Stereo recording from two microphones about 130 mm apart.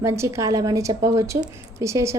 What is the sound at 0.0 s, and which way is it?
A woman's voice, 20° right (ahead or behind).